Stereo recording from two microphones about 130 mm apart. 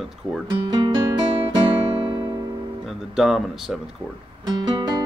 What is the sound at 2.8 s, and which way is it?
Speech, centre (ahead or behind).